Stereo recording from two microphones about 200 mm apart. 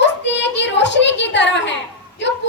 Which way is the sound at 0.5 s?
60° left (ahead or behind).